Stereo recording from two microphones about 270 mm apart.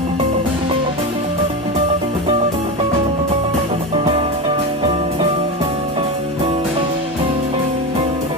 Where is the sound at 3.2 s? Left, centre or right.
Right.